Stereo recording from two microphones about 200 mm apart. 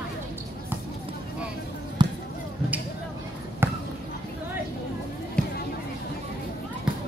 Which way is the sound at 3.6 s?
10° right (ahead or behind).